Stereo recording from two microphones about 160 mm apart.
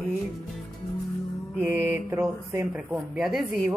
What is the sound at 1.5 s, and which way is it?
Speech, 15° right (ahead or behind).